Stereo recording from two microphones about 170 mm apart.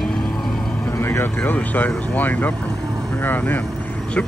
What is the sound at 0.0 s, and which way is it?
Vehicle, 5° left (ahead or behind).